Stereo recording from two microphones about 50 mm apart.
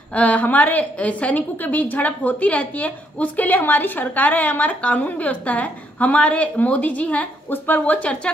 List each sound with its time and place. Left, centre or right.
0.1 s a woman's voice: left
7.4 s a woman's voice: left